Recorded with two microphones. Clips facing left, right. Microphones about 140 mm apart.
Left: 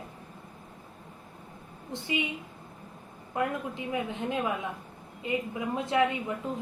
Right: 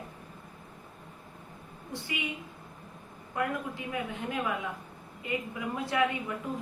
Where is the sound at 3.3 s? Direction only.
20° left (ahead or behind).